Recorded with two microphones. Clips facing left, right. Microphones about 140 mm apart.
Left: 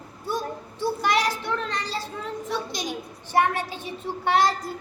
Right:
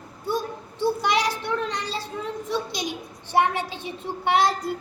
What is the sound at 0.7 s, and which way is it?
A child's voice, 20° right (ahead or behind).